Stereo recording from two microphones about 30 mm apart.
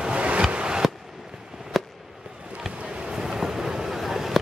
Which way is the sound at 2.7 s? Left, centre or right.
Right.